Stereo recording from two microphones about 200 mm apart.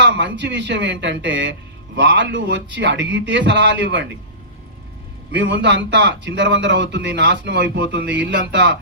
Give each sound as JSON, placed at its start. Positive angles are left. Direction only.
{"t": 0.0, "sound": "a man's voice", "side_deg": -60}
{"t": 5.3, "sound": "a man's voice", "side_deg": -60}